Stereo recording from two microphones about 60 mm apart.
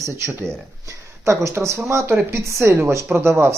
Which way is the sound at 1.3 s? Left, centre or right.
Right.